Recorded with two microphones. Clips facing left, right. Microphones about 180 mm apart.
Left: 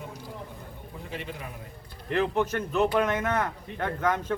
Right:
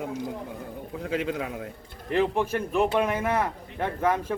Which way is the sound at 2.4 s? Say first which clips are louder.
Right 1 dB; 10° right (ahead or behind).